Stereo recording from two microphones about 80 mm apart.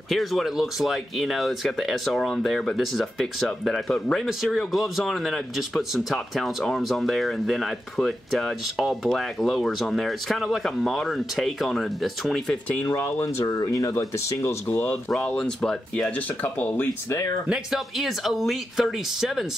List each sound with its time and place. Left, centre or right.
0.1 s speech: centre
12.9 s speech: left
13.6 s speech: left
13.9 s speech: left
14.7 s speech: left
15.0 s speech: centre
16.5 s speech: left
17.5 s speech: centre